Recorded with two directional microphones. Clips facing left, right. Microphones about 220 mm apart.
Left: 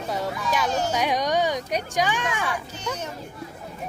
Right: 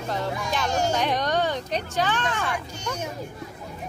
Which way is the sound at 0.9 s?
10° left (ahead or behind).